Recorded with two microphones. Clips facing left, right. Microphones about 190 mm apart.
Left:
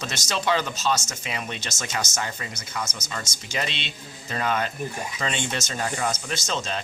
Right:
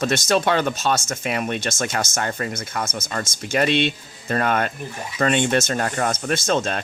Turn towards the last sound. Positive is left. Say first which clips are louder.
# right 8 dB
turn(degrees=-55)  # may be behind; listen again after turning